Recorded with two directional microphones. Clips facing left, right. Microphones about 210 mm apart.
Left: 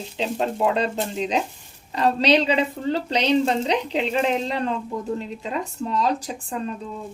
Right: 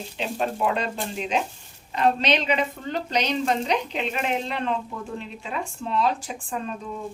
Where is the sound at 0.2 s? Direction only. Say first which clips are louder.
Left 3 dB; 25° left (ahead or behind).